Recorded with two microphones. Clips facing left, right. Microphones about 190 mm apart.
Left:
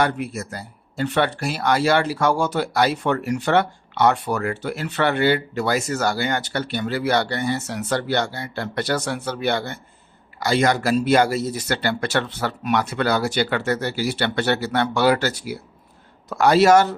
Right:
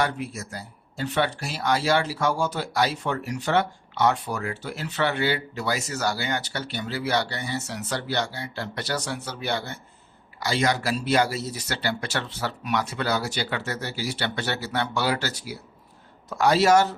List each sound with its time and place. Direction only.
0.0 s speech: 60° left (ahead or behind)